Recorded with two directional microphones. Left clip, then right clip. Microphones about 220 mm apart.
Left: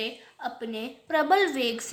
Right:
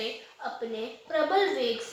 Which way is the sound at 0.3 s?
25° left (ahead or behind).